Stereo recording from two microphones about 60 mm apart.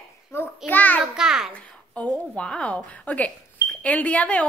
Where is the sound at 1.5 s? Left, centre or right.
Centre.